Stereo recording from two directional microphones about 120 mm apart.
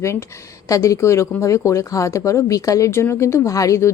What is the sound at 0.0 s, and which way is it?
Speech, 25° left (ahead or behind).